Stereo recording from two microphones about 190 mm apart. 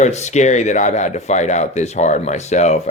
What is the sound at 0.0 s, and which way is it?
Speech, 35° left (ahead or behind).